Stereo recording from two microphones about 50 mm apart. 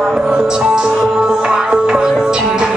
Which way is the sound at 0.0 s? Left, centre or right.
Centre.